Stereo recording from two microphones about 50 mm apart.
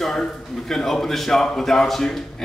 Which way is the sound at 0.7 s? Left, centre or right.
Centre.